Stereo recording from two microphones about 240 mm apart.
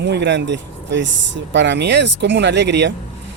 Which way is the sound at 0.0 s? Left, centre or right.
Right.